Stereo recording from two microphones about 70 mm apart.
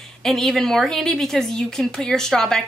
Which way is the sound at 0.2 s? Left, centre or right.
Centre.